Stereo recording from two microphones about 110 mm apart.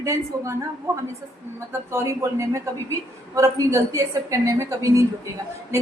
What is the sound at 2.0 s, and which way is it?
A man's voice, 25° right (ahead or behind).